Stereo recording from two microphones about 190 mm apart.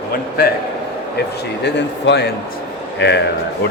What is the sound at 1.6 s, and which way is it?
A man's voice, 65° left (ahead or behind).